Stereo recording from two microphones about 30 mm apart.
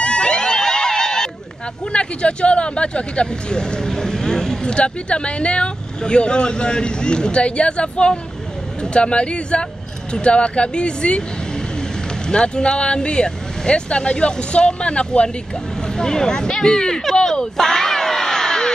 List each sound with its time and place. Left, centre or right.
0.0 s music: left
0.3 s music: left
1.9 s speech: left
3.5 s speech: left
4.7 s speech: left
12.3 s speech: left
16.0 s speech: left
17.0 s a sound: centre